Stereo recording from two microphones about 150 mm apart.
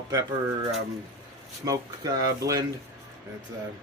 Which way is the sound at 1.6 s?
25° right (ahead or behind).